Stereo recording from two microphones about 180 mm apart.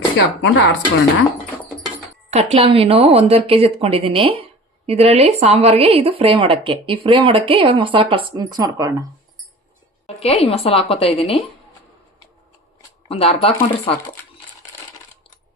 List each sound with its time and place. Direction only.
0.4 s speech: 75° left (ahead or behind)
2.3 s speech: 35° right (ahead or behind)
10.1 s a sound: 35° left (ahead or behind)
10.4 s a woman's voice: 30° left (ahead or behind)
13.1 s a woman's voice: 35° left (ahead or behind)